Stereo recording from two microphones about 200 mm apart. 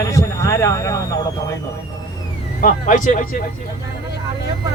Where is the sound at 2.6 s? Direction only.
40° left (ahead or behind).